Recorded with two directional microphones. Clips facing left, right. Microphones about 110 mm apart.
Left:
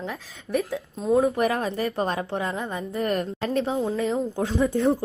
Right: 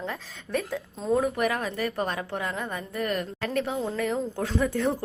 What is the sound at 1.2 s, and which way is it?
A woman's voice, 30° left (ahead or behind).